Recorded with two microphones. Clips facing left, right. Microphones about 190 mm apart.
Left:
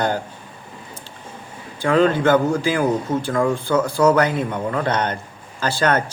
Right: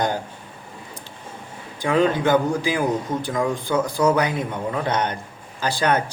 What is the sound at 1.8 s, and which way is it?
Speech, 15° right (ahead or behind).